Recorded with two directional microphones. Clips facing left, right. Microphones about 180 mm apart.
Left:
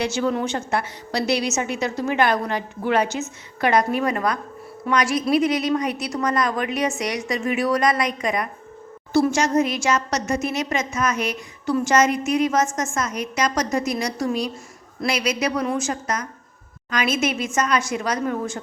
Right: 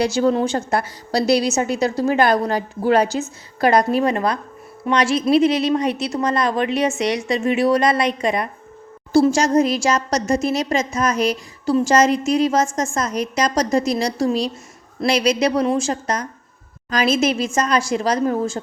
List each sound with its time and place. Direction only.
0.0 s a woman's voice: 35° right (ahead or behind)